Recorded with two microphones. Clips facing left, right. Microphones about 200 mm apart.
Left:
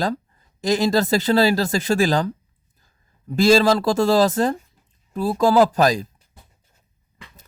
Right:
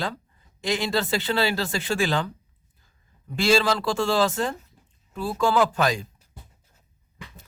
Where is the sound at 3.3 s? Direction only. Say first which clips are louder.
Left 6 dB; 40° left (ahead or behind).